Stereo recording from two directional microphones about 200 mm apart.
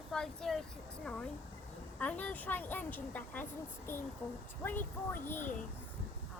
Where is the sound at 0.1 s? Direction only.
Centre (ahead or behind).